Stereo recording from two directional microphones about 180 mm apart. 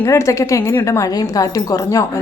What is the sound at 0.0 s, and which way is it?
Speech, 15° left (ahead or behind).